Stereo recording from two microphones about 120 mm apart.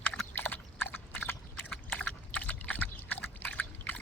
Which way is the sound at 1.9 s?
10° left (ahead or behind).